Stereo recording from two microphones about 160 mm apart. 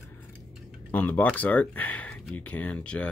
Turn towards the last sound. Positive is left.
turn(degrees=5)  # may be behind; listen again after turning